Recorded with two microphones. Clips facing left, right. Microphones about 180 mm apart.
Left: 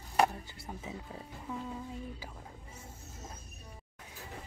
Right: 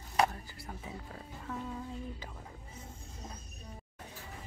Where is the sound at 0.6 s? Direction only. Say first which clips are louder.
Left 2 dB; 20° left (ahead or behind).